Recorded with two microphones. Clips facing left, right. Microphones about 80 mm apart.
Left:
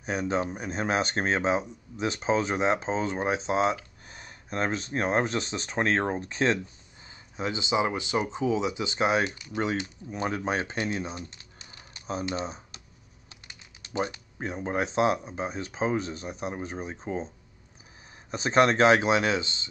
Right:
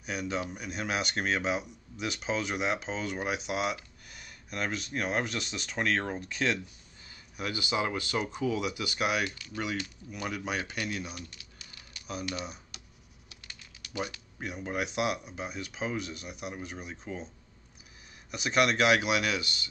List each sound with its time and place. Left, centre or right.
0.0 s speech: left
18.3 s speech: left